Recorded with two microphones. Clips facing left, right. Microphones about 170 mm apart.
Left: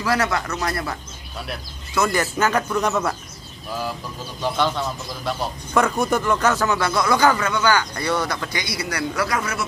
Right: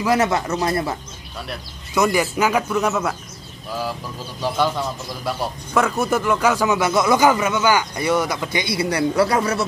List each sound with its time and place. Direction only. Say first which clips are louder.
0.0 s speech: right 3 dB; 20° right (ahead or behind)
2.0 s a man's voice: right 2 dB; 10° right (ahead or behind)
4.4 s a man's voice: right 1 dB; 10° right (ahead or behind); by 9.7 s 35° right (ahead or behind)